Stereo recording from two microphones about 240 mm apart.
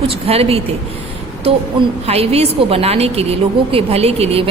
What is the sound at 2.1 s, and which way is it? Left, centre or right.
A woman's voice, right.